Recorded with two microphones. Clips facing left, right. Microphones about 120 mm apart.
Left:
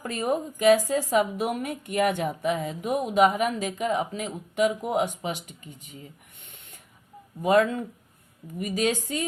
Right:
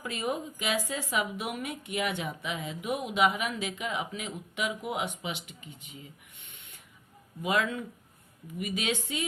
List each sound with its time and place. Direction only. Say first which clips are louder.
0.0 s a woman's voice: left 6 dB; 40° left (ahead or behind)